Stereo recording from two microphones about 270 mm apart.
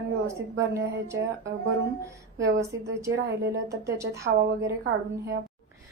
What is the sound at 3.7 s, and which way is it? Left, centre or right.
A woman's voice, centre.